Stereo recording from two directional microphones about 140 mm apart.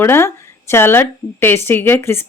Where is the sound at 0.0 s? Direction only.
15° left (ahead or behind).